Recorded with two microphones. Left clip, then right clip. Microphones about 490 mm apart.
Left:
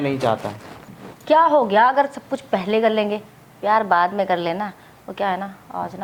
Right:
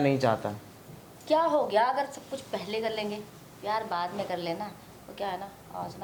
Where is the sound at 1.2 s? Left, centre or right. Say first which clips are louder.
Left 10 dB; left.